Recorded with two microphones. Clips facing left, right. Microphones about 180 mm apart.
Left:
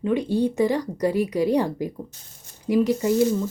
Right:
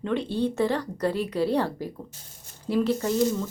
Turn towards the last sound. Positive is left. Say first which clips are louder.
# left 4 dB
turn(degrees=15)  # may be behind; listen again after turning